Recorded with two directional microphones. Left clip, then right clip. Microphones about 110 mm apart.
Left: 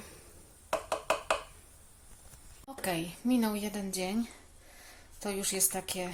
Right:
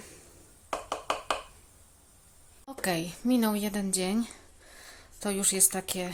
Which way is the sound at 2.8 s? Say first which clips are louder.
Right 3 dB; 40° right (ahead or behind).